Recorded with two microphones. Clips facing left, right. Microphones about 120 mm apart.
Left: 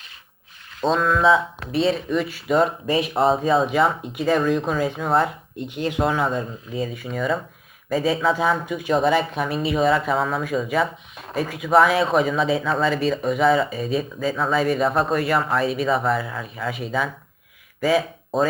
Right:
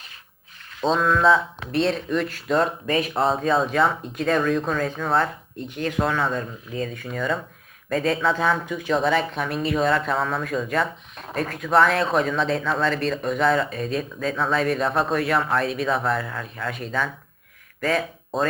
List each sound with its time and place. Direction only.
0.9 s speech: centre (ahead or behind)
5.6 s speech: 15° left (ahead or behind)
6.3 s speech: 5° left (ahead or behind)